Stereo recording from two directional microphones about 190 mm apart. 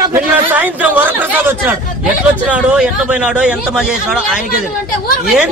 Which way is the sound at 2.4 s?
5° right (ahead or behind).